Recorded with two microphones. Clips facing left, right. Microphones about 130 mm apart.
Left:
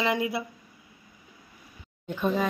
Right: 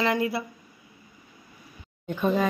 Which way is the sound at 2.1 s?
Centre (ahead or behind).